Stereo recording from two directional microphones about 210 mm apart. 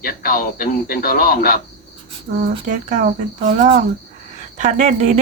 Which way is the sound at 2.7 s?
40° right (ahead or behind).